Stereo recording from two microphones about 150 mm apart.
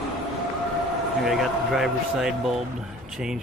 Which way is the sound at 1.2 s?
Centre (ahead or behind).